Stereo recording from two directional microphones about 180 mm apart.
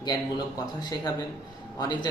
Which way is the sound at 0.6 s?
20° left (ahead or behind).